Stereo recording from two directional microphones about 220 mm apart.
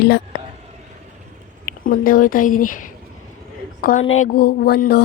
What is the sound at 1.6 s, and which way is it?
A woman's voice, 40° left (ahead or behind).